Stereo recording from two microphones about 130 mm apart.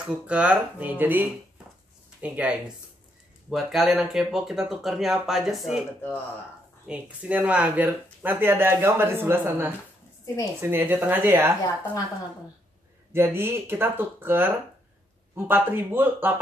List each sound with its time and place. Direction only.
0.0 s speech: 10° right (ahead or behind)
6.9 s speech: 10° right (ahead or behind)
13.1 s speech: 15° right (ahead or behind)